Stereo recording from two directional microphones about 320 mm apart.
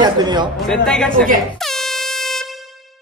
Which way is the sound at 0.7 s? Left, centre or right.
Centre.